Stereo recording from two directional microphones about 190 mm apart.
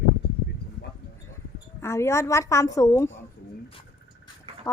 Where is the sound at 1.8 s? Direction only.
15° left (ahead or behind).